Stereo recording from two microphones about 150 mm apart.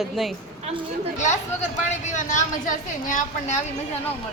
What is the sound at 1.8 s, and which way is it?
A woman's voice, 55° left (ahead or behind).